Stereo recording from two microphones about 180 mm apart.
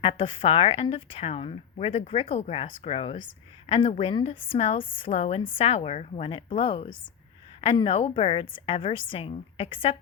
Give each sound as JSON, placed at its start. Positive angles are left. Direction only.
{"t": 0.0, "sound": "a woman's voice", "side_deg": 30}